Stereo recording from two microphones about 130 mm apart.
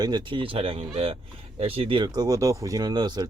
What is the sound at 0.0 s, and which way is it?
Speech, 35° right (ahead or behind).